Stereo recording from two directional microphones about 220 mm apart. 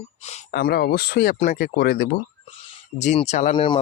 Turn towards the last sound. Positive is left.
turn(degrees=20)  # may be behind; listen again after turning